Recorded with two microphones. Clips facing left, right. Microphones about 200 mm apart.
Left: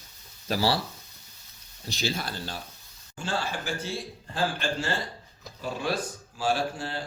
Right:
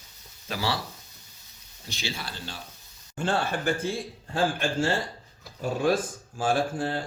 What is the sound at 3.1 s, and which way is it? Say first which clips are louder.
Speech: right 4 dB; 60° right (ahead or behind).